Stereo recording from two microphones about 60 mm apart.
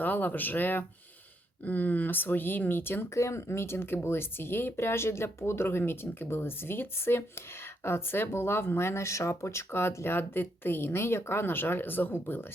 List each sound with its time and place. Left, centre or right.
0.0 s speech: left